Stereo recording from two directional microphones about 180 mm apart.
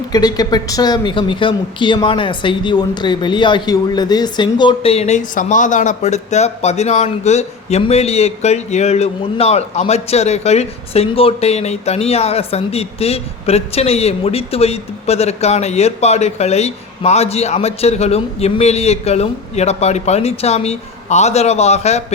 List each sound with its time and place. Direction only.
0.1 s speech: 20° left (ahead or behind); by 22.0 s 35° left (ahead or behind)